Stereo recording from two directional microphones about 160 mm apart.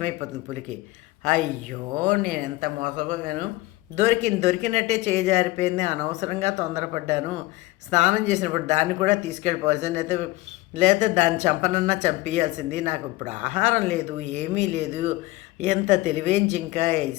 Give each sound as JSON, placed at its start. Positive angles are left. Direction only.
{"t": 0.0, "sound": "speech", "side_deg": -45}